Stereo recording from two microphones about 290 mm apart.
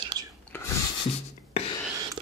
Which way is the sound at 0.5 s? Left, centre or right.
Centre.